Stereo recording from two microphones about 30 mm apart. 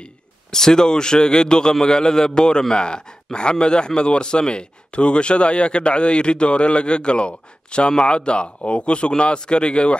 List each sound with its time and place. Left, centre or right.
0.5 s a man's voice: centre; by 9.9 s left